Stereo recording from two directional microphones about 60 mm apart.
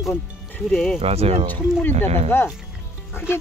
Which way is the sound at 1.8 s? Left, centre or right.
Left.